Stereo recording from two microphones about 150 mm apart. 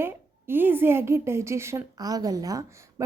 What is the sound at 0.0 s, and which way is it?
A woman's voice, 15° right (ahead or behind).